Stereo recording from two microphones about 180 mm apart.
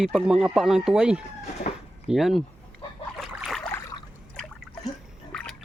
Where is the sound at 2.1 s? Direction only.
Centre (ahead or behind).